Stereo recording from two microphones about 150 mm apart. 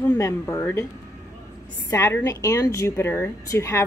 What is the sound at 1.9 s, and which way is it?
A woman's voice, 20° left (ahead or behind).